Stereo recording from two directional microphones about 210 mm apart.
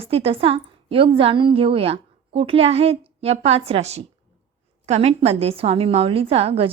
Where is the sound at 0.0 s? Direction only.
30° right (ahead or behind).